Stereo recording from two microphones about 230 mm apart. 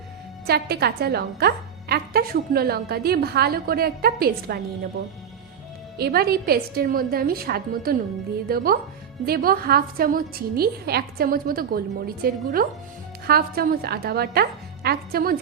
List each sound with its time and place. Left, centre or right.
0.4 s a woman's voice: right
6.0 s a woman's voice: right